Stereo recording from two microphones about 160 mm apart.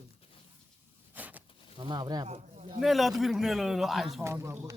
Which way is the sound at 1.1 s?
10° right (ahead or behind).